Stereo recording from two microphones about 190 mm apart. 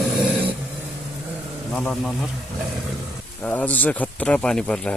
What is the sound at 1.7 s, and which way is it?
Speech, centre (ahead or behind).